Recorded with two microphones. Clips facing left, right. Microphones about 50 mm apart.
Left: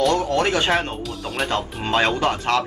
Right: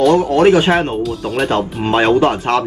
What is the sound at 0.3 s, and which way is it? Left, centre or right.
Speech, centre.